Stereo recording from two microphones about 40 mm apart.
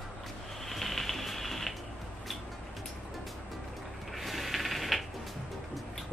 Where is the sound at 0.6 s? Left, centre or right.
Centre.